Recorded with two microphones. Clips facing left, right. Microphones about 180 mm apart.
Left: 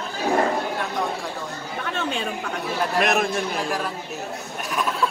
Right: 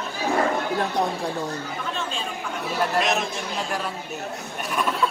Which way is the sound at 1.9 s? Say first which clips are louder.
Left 7 dB; 65° left (ahead or behind).